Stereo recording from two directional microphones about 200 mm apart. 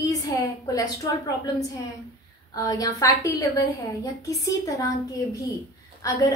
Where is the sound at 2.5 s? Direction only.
20° left (ahead or behind).